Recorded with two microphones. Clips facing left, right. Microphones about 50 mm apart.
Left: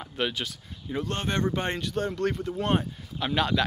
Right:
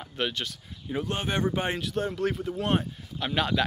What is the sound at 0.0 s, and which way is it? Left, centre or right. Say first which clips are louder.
Speech: left 1 dB; centre.